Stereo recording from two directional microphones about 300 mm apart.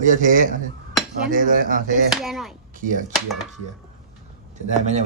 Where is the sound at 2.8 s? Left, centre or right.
Right.